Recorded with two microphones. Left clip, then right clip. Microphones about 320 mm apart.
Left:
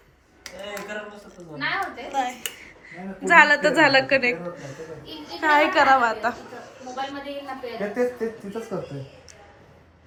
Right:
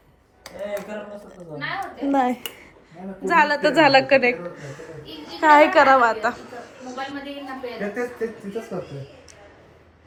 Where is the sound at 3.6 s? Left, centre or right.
Centre.